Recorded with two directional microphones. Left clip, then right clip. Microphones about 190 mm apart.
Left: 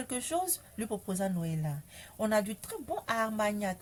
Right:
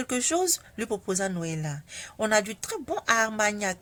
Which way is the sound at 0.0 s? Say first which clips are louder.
Right 7 dB; 40° right (ahead or behind).